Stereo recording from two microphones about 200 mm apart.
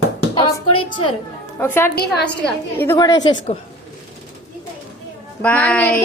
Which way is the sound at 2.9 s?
20° left (ahead or behind).